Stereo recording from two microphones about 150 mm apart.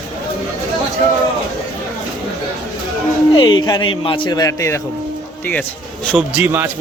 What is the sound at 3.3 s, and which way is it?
A man's voice, 30° left (ahead or behind).